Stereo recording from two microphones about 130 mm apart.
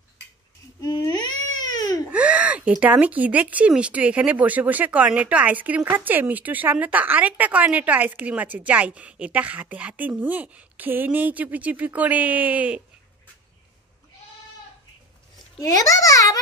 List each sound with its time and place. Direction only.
0.8 s baby cry: 30° left (ahead or behind)
2.1 s speech: 10° right (ahead or behind)
15.6 s a child's voice: 25° left (ahead or behind)